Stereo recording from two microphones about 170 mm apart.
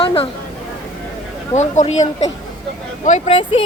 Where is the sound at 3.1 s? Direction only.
40° left (ahead or behind).